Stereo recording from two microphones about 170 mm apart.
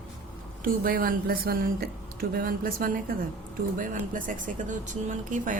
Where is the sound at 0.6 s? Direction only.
55° right (ahead or behind).